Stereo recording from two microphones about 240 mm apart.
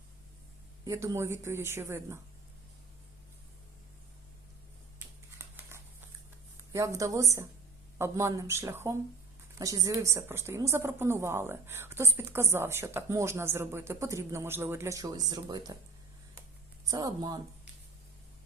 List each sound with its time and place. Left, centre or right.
0.9 s a woman's voice: centre
5.4 s a sound: centre
6.7 s a woman's voice: centre
16.8 s a woman's voice: centre